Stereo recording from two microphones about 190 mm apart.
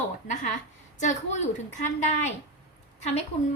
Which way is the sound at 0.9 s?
40° left (ahead or behind).